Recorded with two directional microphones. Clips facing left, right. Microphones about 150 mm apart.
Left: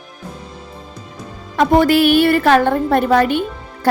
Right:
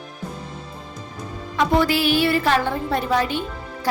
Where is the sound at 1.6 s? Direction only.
55° left (ahead or behind).